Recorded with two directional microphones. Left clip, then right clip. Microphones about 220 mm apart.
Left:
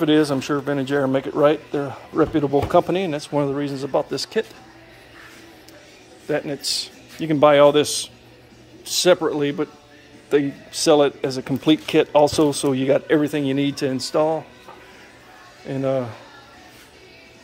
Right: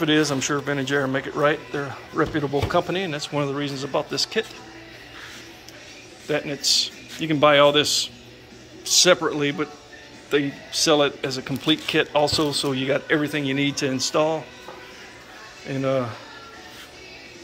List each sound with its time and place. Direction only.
0.0 s speech: 25° left (ahead or behind)
6.2 s speech: 25° left (ahead or behind)
15.6 s speech: 20° left (ahead or behind)